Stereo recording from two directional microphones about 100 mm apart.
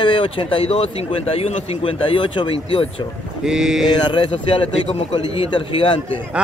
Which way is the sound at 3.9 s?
50° left (ahead or behind).